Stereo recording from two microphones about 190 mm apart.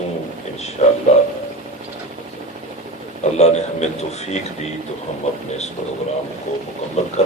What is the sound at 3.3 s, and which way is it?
Speech, 35° left (ahead or behind).